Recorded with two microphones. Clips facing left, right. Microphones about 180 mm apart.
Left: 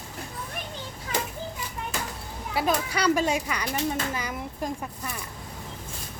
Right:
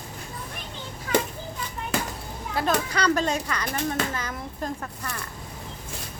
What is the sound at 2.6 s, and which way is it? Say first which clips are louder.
Speech: right 1 dB; 10° left (ahead or behind).